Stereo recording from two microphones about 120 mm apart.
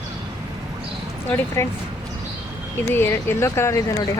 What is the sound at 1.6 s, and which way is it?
Speech, 20° left (ahead or behind).